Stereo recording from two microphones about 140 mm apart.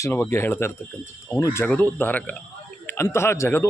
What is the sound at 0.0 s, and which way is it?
Speech, 20° left (ahead or behind).